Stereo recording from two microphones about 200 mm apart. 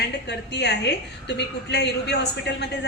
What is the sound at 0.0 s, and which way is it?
A woman's voice, 55° left (ahead or behind).